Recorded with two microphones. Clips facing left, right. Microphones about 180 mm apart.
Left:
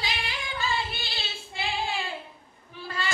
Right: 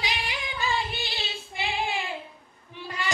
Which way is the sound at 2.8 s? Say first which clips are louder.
Even; 15° right (ahead or behind).